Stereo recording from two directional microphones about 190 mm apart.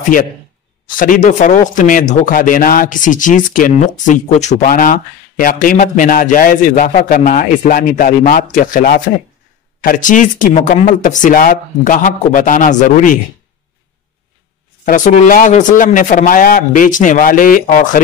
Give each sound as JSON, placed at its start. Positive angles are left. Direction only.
{"t": 0.8, "sound": "speech", "side_deg": 45}
{"t": 14.9, "sound": "speech", "side_deg": 45}